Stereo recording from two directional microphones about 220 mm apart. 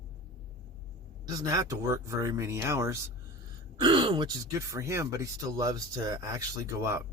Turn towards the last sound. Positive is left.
turn(degrees=-15)  # may be behind; listen again after turning